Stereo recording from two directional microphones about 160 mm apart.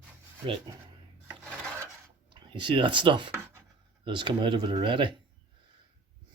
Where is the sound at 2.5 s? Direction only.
30° right (ahead or behind).